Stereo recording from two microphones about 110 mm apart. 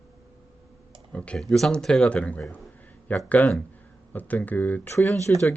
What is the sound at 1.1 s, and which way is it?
Speech, 10° left (ahead or behind).